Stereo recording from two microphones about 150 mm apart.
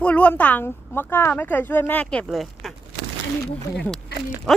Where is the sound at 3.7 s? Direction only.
Centre (ahead or behind).